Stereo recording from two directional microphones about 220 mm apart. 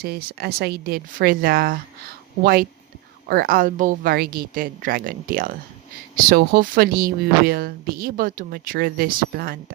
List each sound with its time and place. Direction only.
0.0 s a woman's voice: 45° right (ahead or behind)